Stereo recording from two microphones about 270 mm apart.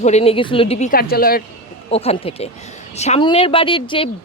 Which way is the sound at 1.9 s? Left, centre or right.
Left.